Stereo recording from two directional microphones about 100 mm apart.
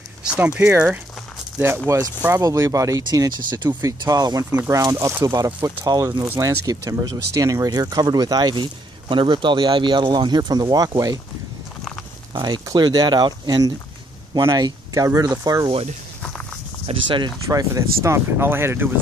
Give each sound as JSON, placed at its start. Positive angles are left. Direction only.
{"t": 0.2, "sound": "speech", "side_deg": -15}
{"t": 1.9, "sound": "speech", "side_deg": -30}
{"t": 9.1, "sound": "speech", "side_deg": -55}
{"t": 12.4, "sound": "speech", "side_deg": -50}
{"t": 16.8, "sound": "speech", "side_deg": -60}
{"t": 17.5, "sound": "speech", "side_deg": -35}